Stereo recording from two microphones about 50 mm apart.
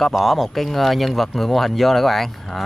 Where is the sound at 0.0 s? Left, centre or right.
Centre.